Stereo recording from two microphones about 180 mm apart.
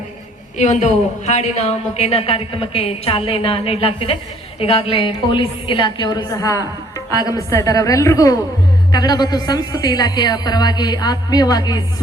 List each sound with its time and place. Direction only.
0.5 s a woman's voice: 40° left (ahead or behind); by 11.8 s 20° left (ahead or behind)